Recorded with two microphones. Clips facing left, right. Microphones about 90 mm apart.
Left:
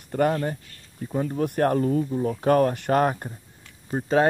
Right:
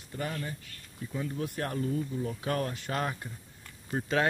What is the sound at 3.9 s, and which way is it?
Speech, 30° left (ahead or behind).